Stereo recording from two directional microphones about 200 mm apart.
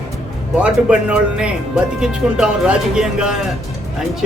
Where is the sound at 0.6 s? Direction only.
5° right (ahead or behind).